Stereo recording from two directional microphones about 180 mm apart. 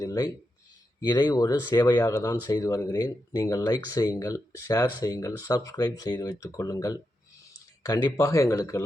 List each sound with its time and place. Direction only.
0.0 s speech: 20° left (ahead or behind)